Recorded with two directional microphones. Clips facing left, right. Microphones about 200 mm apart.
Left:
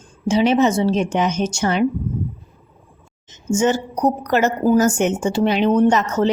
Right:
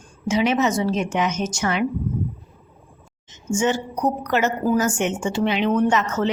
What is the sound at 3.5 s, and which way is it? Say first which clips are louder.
A woman's voice: left 4 dB; 40° left (ahead or behind).